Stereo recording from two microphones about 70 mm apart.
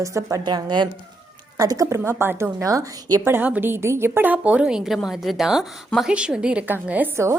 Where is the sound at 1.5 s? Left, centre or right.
Right.